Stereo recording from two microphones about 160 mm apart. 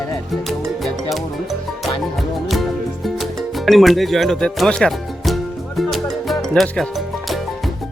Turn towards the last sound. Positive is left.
turn(degrees=0)  # may be behind; listen again after turning